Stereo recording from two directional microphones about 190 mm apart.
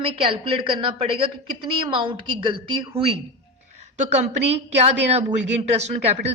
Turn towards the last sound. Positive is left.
turn(degrees=-35)  # may be behind; listen again after turning